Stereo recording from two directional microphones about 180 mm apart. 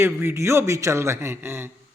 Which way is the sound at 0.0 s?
15° right (ahead or behind).